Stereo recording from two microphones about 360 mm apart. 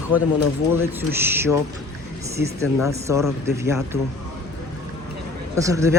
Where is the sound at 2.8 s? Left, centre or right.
Centre.